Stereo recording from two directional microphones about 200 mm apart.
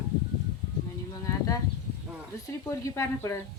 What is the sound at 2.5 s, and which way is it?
Speech, 15° left (ahead or behind).